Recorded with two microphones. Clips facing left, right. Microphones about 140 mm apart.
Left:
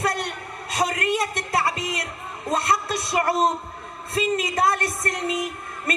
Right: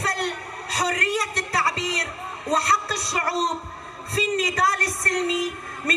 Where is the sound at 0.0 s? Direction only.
25° left (ahead or behind).